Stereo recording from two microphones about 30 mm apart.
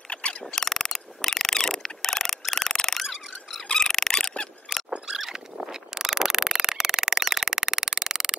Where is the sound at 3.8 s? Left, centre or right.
Centre.